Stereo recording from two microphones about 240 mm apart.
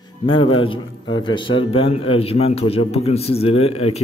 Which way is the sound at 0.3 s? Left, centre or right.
Left.